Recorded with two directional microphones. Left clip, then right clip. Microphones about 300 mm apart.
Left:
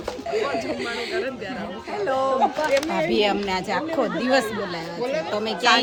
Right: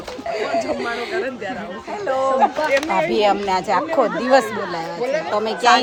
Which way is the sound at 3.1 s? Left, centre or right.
Centre.